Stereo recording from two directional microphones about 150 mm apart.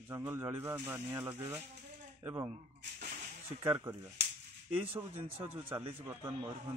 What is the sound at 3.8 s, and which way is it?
Speech, 20° right (ahead or behind).